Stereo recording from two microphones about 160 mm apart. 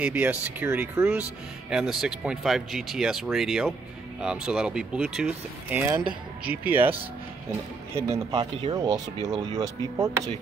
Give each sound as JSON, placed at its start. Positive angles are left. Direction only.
{"t": 0.0, "sound": "speech", "side_deg": -10}
{"t": 1.7, "sound": "speech", "side_deg": -5}
{"t": 8.4, "sound": "speech", "side_deg": -30}